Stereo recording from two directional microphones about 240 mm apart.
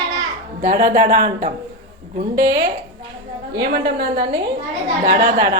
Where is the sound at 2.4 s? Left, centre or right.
Right.